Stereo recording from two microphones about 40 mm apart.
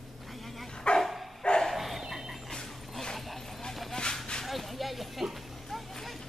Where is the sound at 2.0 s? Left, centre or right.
Centre.